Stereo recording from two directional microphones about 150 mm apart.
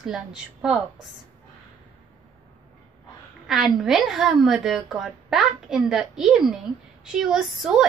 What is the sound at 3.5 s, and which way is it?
A woman's voice, centre (ahead or behind).